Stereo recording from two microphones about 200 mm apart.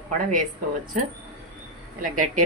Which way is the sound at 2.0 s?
40° right (ahead or behind).